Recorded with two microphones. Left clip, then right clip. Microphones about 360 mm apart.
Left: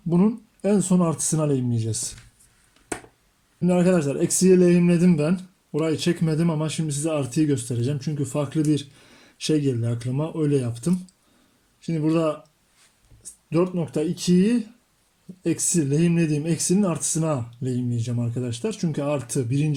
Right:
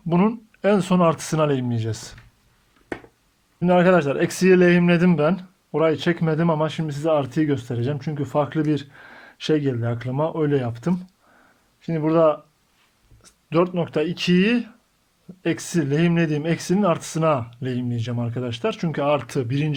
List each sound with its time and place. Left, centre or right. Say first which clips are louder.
0.6 s speech: right 5 dB; right
3.6 s speech: right 5 dB; right
13.5 s speech: right 3 dB; right